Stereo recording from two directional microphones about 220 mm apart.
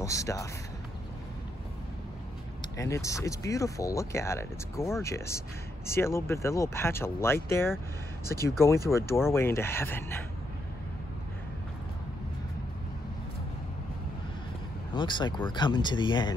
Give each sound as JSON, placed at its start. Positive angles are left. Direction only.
{"t": 0.0, "sound": "speech", "side_deg": 15}
{"t": 2.8, "sound": "speech", "side_deg": 15}
{"t": 15.0, "sound": "speech", "side_deg": 20}